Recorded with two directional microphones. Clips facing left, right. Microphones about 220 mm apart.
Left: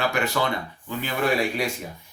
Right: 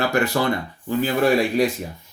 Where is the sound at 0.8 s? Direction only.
35° right (ahead or behind).